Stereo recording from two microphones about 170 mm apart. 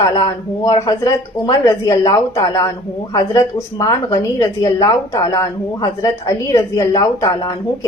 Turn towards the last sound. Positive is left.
turn(degrees=20)  # may be behind; listen again after turning